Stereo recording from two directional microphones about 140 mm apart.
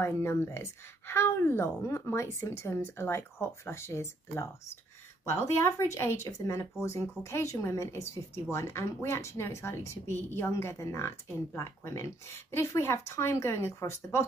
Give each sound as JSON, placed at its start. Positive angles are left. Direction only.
{"t": 0.0, "sound": "speech", "side_deg": 20}